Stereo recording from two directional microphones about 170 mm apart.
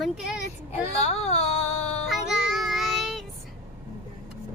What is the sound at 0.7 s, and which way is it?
Baby cry, 40° left (ahead or behind).